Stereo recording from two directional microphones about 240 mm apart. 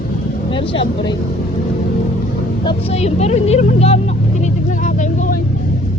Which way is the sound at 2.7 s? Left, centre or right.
Left.